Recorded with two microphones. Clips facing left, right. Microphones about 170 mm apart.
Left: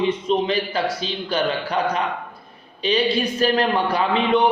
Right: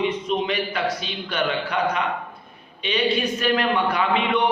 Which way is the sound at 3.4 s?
35° left (ahead or behind).